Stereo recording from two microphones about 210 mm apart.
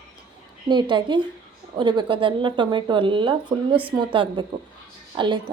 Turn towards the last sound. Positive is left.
turn(degrees=-20)  # may be behind; listen again after turning